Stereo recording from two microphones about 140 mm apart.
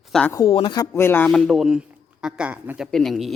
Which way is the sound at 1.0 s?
15° left (ahead or behind).